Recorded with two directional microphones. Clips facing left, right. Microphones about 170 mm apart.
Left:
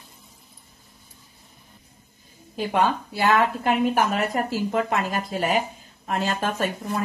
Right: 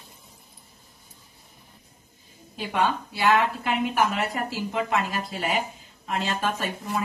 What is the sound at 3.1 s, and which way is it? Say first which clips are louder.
Speech: left 1 dB; 40° left (ahead or behind).